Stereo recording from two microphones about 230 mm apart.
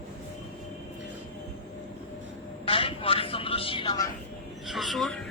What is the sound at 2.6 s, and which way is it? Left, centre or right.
Vehicle, left.